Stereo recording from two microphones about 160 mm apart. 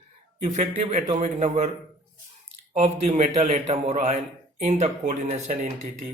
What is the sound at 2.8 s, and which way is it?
Speech, 45° right (ahead or behind).